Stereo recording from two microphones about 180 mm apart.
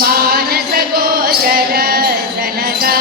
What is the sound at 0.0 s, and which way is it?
Music, 55° right (ahead or behind).